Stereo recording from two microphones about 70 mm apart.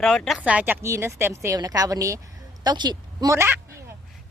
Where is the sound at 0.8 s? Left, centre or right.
Right.